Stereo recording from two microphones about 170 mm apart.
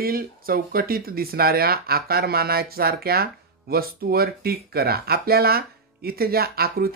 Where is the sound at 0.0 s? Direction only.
60° right (ahead or behind).